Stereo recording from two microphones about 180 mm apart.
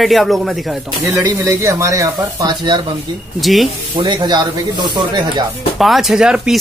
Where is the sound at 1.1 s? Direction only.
15° right (ahead or behind).